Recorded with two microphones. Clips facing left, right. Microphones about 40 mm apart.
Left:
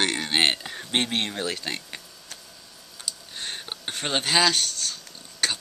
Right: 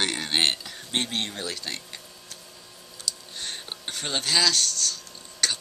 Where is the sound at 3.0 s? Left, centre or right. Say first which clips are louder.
Even; centre.